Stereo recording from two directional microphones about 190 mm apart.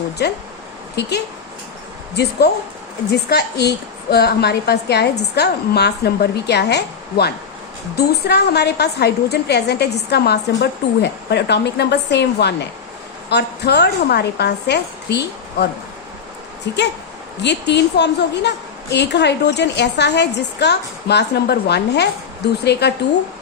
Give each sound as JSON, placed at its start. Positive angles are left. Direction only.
{"t": 0.2, "sound": "a woman's voice", "side_deg": 60}
{"t": 2.2, "sound": "a woman's voice", "side_deg": 60}
{"t": 17.4, "sound": "a woman's voice", "side_deg": 65}